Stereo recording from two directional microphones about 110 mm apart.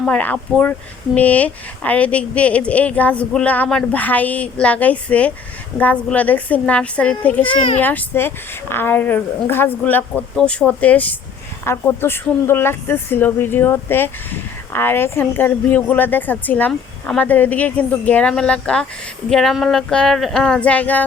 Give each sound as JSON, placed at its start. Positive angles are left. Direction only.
{"t": 0.0, "sound": "a woman's voice", "side_deg": 10}